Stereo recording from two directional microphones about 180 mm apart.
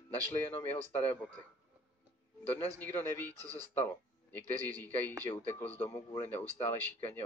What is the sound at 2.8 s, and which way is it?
Speech, 10° left (ahead or behind).